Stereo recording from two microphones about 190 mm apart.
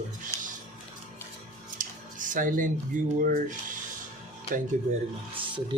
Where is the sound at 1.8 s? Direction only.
45° right (ahead or behind).